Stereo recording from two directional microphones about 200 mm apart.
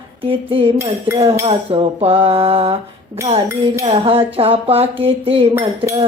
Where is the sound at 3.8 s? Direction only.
30° right (ahead or behind).